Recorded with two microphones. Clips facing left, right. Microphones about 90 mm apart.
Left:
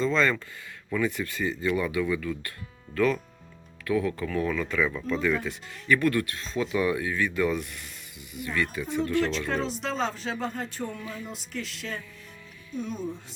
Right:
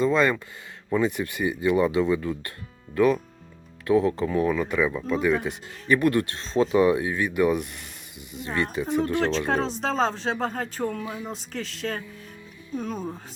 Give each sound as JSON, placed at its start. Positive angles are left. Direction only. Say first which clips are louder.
{"t": 0.0, "sound": "speech", "louder": "right 3 dB", "side_deg": -15}
{"t": 9.5, "sound": "speech", "louder": "right 4 dB", "side_deg": -40}
{"t": 11.0, "sound": "speech", "louder": "right 4 dB", "side_deg": -15}
{"t": 11.3, "sound": "speech", "louder": "right 3 dB", "side_deg": -35}